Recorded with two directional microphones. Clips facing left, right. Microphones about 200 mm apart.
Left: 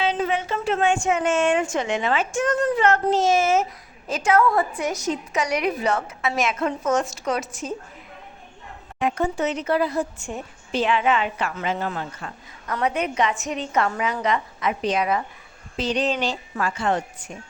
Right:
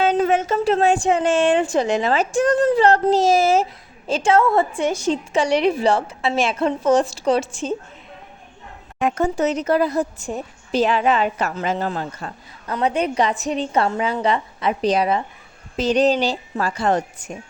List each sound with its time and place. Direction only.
0.0 s a woman's voice: 45° right (ahead or behind); by 7.8 s 30° right (ahead or behind)
9.0 s a woman's voice: 45° right (ahead or behind)